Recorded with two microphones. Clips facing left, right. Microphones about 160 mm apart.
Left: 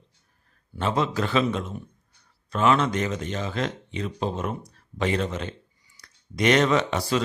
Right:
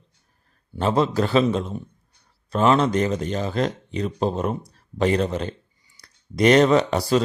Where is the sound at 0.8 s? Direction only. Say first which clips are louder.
Right 5 dB; 35° right (ahead or behind).